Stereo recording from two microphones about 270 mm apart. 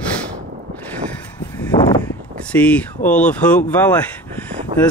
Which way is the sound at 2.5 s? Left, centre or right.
Centre.